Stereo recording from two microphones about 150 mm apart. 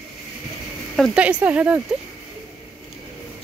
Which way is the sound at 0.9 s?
5° right (ahead or behind).